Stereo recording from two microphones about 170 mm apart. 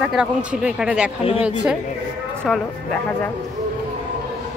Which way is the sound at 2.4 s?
5° left (ahead or behind).